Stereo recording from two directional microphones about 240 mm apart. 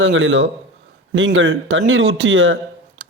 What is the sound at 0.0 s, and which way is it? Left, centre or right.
A man's voice, right.